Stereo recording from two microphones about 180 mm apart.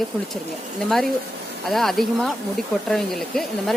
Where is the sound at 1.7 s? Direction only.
Centre (ahead or behind).